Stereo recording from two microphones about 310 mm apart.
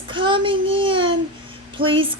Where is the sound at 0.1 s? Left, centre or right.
Centre.